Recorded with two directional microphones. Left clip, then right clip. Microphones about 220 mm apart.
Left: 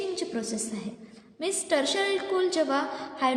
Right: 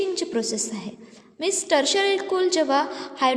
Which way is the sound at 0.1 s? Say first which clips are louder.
Right 6 dB; 40° right (ahead or behind).